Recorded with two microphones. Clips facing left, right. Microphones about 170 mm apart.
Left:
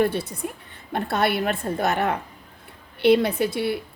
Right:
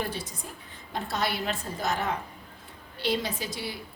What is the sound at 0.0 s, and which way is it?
A woman's voice, 60° left (ahead or behind).